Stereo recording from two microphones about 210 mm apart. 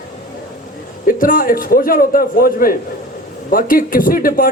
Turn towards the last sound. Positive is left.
turn(degrees=40)  # may be behind; listen again after turning